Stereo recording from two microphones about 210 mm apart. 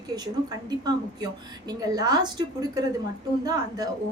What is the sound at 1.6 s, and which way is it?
A woman's voice, 20° right (ahead or behind).